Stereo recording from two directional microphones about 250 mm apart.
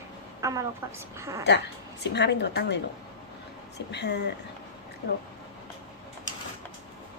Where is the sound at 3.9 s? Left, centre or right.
Left.